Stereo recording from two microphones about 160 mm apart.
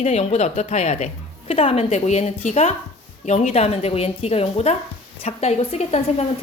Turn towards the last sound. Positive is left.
turn(degrees=40)  # may be behind; listen again after turning